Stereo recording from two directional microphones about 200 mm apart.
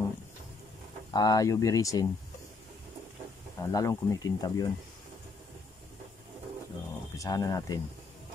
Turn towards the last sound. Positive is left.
turn(degrees=20)  # may be behind; listen again after turning